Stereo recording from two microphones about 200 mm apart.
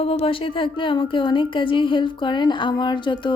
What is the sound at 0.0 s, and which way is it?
A woman's voice, 30° left (ahead or behind).